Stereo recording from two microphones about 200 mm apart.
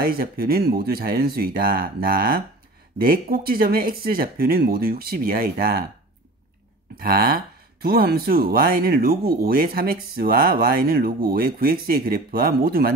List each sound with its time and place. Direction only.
0.0 s speech: 45° right (ahead or behind)
7.0 s speech: 45° right (ahead or behind)